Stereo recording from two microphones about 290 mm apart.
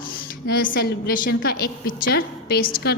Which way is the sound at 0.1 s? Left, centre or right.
Left.